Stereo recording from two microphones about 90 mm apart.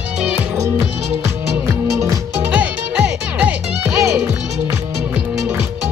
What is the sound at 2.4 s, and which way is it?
Music, 15° right (ahead or behind).